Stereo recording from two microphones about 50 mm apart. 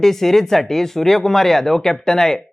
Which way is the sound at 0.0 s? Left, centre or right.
Centre.